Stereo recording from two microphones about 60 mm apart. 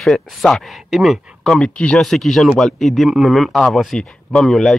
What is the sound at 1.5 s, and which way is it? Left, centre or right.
Speech, centre.